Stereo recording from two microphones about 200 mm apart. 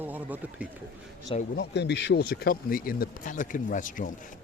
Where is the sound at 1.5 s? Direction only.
55° left (ahead or behind); by 4.1 s 40° left (ahead or behind).